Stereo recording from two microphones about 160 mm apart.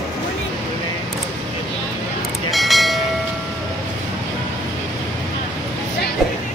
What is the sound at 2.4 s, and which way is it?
Train, centre (ahead or behind).